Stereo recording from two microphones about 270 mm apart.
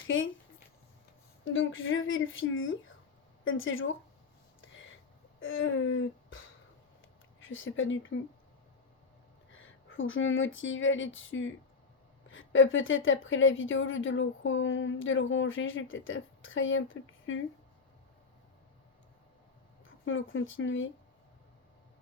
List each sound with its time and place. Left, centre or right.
1.5 s speech: left
5.4 s a sound: left
7.3 s speech: left
9.5 s speech: left
19.8 s speech: left